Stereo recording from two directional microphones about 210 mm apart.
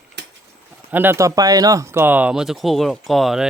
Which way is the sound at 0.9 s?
10° right (ahead or behind).